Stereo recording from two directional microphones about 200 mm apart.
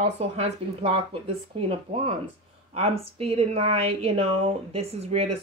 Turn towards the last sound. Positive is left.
turn(degrees=-30)  # may be behind; listen again after turning